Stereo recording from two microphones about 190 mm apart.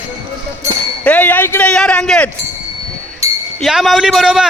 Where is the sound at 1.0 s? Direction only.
5° left (ahead or behind).